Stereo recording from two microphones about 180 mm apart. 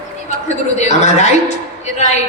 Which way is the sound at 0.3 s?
40° left (ahead or behind).